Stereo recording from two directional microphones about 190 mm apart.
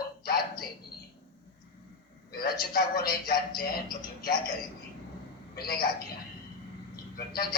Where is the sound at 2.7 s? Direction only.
50° left (ahead or behind).